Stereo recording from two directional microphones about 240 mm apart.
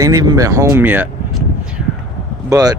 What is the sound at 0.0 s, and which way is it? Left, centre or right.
Speech, centre.